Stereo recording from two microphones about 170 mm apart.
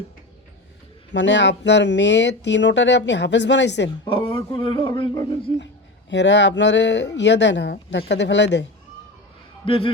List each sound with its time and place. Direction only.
1.1 s speech: 90° left
3.8 s speech: 30° left (ahead or behind)
6.1 s speech: 90° left
9.6 s speech: 30° left (ahead or behind)